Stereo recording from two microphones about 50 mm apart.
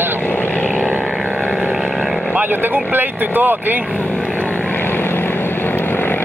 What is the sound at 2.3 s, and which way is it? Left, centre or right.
Speech, right.